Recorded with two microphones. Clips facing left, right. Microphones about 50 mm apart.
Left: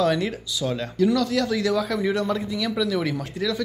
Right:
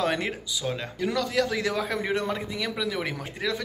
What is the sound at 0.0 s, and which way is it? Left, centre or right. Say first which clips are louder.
Speech: left 5 dB; right.